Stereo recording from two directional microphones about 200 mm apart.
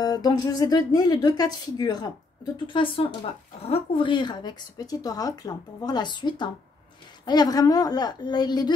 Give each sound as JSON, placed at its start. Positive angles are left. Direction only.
{"t": 0.0, "sound": "speech", "side_deg": 20}